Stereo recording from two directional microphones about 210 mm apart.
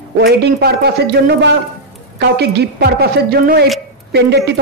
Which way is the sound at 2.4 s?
50° right (ahead or behind).